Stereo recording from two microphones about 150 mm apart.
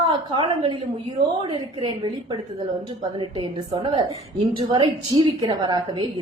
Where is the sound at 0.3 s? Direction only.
35° right (ahead or behind).